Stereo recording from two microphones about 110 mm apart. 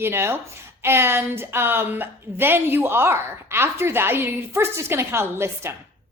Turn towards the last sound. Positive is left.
turn(degrees=-20)  # may be behind; listen again after turning